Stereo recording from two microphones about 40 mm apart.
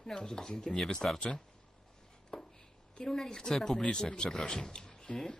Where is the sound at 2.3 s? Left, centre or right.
Left.